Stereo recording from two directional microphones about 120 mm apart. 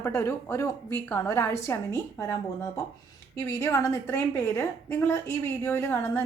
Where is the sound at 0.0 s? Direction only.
25° left (ahead or behind).